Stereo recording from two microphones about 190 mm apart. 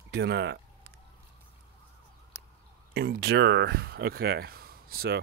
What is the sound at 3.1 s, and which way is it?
Speech, 60° right (ahead or behind).